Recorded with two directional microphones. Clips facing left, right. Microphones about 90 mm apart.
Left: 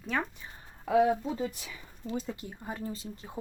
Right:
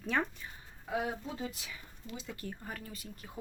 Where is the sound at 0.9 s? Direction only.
90° left.